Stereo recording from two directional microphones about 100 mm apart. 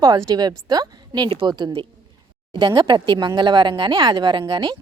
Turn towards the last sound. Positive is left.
turn(degrees=-50)  # may be behind; listen again after turning